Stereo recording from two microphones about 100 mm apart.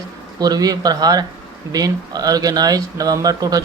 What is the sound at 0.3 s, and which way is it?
Speech, 40° right (ahead or behind).